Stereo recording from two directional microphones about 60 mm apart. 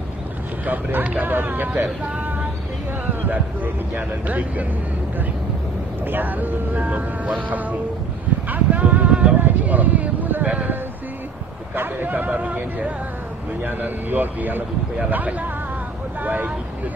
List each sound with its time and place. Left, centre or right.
0.7 s speech: right
6.0 s speech: right
8.5 s a sound: right
11.7 s speech: right